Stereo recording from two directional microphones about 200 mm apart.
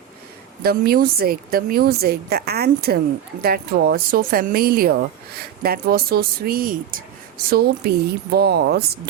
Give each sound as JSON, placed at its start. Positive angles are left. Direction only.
{"t": 0.6, "sound": "a woman's voice", "side_deg": -50}